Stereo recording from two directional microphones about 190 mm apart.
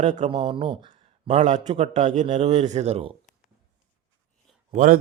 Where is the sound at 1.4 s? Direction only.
40° right (ahead or behind).